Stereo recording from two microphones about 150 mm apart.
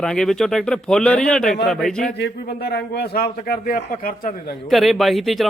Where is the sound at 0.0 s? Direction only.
5° left (ahead or behind).